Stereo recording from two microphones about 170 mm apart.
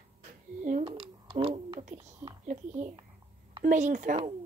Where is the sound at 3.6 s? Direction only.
45° right (ahead or behind).